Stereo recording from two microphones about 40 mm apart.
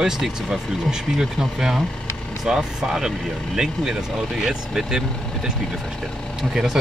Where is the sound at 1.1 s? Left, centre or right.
Centre.